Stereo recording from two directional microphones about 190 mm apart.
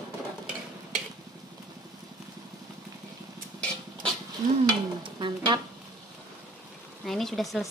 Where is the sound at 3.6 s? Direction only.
5° left (ahead or behind).